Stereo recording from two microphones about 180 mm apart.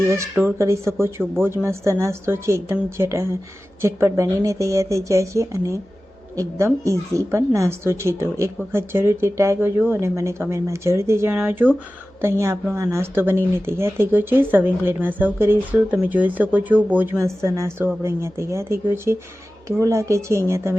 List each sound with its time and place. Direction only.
0.1 s speech: 15° right (ahead or behind)